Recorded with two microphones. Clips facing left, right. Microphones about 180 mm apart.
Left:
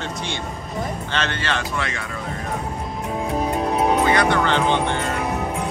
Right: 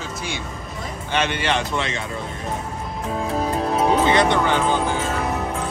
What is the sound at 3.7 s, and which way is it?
Music, 25° right (ahead or behind).